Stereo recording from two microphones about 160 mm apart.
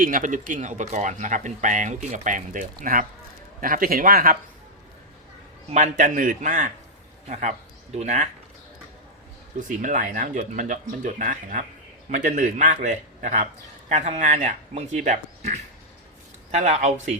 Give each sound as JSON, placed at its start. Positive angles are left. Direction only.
{"t": 0.0, "sound": "a man's voice", "side_deg": -55}
{"t": 5.7, "sound": "a man's voice", "side_deg": -50}
{"t": 9.6, "sound": "a man's voice", "side_deg": -55}